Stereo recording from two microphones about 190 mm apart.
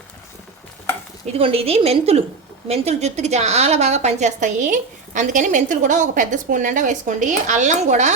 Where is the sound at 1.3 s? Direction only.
30° right (ahead or behind).